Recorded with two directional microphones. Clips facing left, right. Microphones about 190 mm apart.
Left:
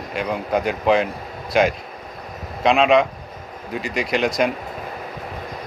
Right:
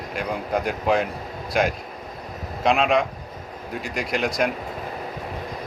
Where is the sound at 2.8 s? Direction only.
80° left.